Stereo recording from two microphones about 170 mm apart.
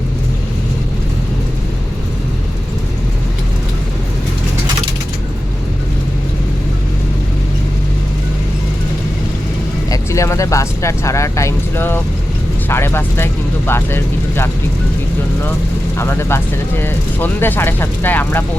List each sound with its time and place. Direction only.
9.9 s speech: 15° left (ahead or behind)
16.0 s speech: 15° left (ahead or behind)